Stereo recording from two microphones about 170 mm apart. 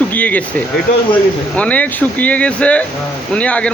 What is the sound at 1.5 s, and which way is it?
Speech, 10° left (ahead or behind).